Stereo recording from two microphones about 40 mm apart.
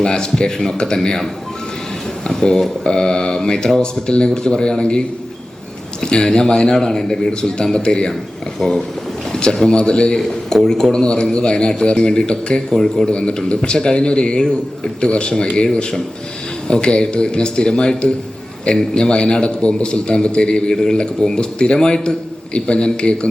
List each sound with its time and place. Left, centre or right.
0.0 s speech: centre
2.8 s a man's voice: centre
9.3 s a man's voice: centre